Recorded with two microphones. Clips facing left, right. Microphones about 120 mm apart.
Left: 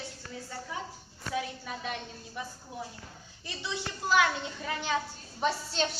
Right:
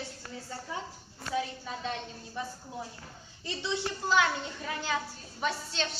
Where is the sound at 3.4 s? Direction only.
25° right (ahead or behind).